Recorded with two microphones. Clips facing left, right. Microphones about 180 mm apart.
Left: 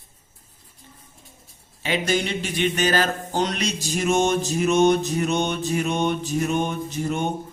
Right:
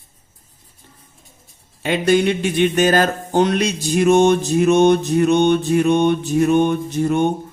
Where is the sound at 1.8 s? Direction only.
55° right (ahead or behind).